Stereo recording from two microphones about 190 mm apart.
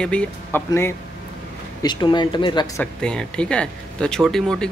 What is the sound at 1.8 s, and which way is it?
Speech, 25° left (ahead or behind).